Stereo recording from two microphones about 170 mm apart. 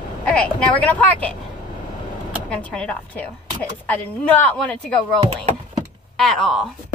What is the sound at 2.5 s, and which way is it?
A woman's voice, 5° left (ahead or behind).